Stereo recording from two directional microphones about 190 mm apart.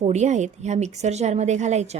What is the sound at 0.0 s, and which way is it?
A woman's voice, 35° right (ahead or behind).